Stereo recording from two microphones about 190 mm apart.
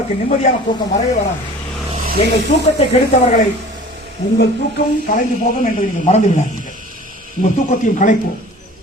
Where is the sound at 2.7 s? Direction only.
35° left (ahead or behind).